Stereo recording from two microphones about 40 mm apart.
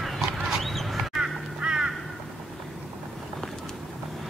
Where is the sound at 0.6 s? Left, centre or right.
Centre.